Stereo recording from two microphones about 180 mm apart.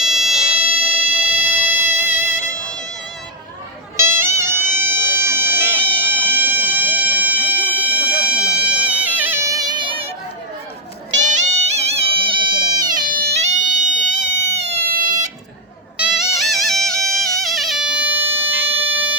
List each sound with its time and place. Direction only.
0.0 s fire alarm: centre (ahead or behind)
0.9 s music: 10° right (ahead or behind)
3.9 s music: 15° right (ahead or behind)
4.7 s a sound: 10° right (ahead or behind)
8.2 s music: 5° right (ahead or behind); by 10.1 s 30° right (ahead or behind)
11.1 s music: 40° right (ahead or behind); by 13.1 s 25° right (ahead or behind)
13.1 s music: 55° right (ahead or behind)
13.3 s music: 40° right (ahead or behind)
16.0 s music: 5° right (ahead or behind)